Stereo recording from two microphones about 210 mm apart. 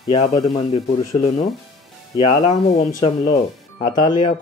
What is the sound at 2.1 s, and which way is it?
Speech, 30° left (ahead or behind).